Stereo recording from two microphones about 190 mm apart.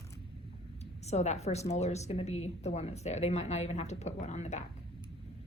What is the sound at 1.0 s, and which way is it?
A woman's voice, 35° left (ahead or behind).